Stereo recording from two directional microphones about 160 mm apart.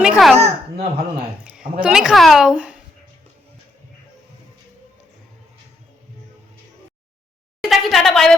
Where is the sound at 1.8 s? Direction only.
5° right (ahead or behind).